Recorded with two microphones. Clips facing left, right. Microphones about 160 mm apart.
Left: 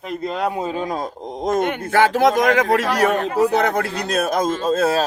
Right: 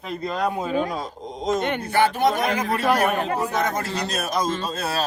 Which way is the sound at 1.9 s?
90° left.